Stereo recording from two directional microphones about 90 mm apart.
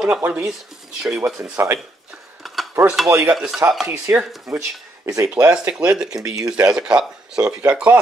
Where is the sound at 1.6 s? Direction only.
30° right (ahead or behind).